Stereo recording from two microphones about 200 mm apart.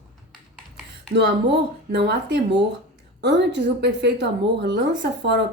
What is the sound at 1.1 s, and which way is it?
Speech, 60° right (ahead or behind).